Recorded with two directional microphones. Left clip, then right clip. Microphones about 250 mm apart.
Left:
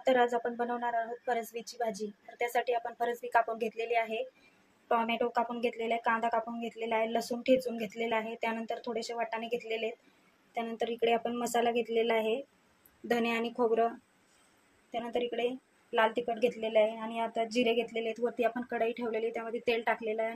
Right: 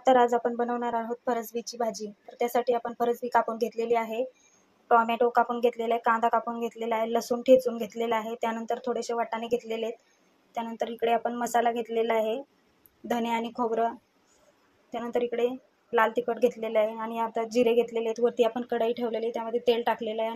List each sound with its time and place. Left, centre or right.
0.0 s a woman's voice: centre